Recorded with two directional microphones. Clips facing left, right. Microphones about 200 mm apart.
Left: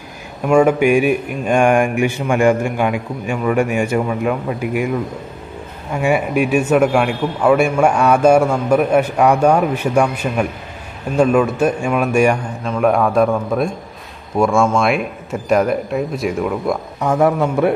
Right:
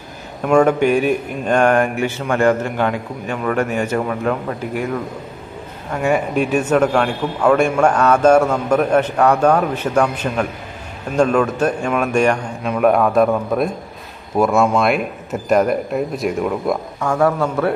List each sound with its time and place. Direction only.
0.5 s a man's voice: 10° left (ahead or behind)
12.6 s speech: 5° right (ahead or behind)
17.0 s a man's voice: 20° left (ahead or behind)